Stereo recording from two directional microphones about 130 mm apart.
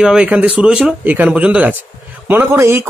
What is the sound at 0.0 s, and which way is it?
Speech, 5° right (ahead or behind).